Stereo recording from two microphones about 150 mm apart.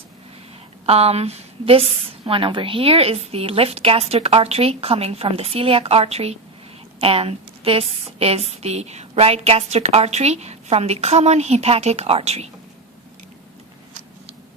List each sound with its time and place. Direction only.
0.9 s a woman's voice: 40° right (ahead or behind)